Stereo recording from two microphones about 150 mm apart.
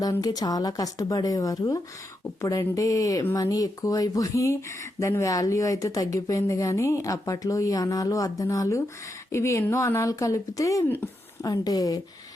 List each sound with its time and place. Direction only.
0.0 s speech: 25° left (ahead or behind)